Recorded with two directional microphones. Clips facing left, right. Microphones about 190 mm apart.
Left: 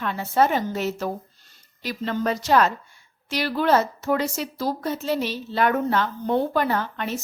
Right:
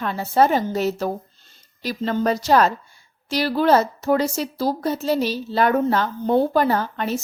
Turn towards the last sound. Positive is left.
turn(degrees=-35)  # may be behind; listen again after turning